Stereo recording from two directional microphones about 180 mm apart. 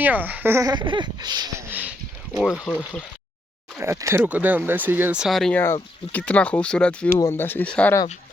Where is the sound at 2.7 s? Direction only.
10° left (ahead or behind).